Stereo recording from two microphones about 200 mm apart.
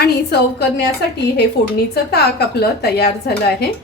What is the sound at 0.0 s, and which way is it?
Speech, 55° left (ahead or behind).